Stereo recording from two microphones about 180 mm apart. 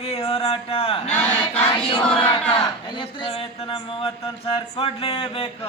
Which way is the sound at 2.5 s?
25° left (ahead or behind).